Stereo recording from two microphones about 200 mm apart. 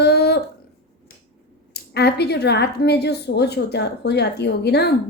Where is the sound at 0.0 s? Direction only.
55° left (ahead or behind).